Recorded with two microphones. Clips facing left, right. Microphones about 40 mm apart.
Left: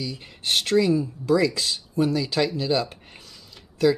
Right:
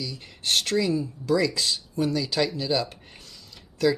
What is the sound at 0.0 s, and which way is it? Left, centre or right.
Speech, centre.